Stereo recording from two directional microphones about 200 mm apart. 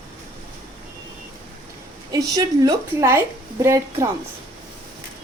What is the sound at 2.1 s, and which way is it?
A woman's voice, 20° right (ahead or behind).